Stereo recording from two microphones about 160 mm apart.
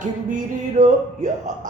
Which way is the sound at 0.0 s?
50° right (ahead or behind).